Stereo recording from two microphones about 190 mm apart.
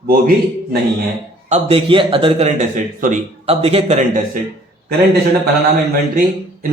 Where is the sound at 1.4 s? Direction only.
30° right (ahead or behind).